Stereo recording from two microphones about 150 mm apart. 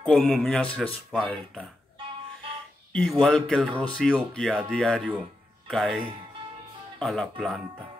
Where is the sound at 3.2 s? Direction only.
5° left (ahead or behind).